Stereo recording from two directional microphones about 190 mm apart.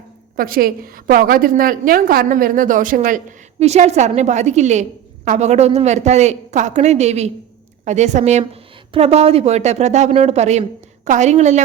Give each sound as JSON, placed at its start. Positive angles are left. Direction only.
{"t": 0.3, "sound": "a woman's voice", "side_deg": -50}
{"t": 3.6, "sound": "a woman's voice", "side_deg": -35}